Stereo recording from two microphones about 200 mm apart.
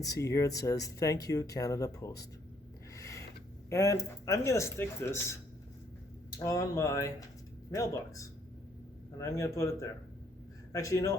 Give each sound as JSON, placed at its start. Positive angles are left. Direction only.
{"t": 0.0, "sound": "speech", "side_deg": 15}
{"t": 2.9, "sound": "a sound", "side_deg": 15}
{"t": 3.7, "sound": "speech", "side_deg": 15}
{"t": 6.4, "sound": "a man's voice", "side_deg": 15}